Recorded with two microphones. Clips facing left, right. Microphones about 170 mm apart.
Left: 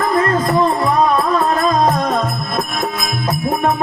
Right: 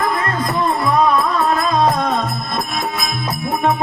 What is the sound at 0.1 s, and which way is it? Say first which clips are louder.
Music: left 5 dB; 40° left (ahead or behind).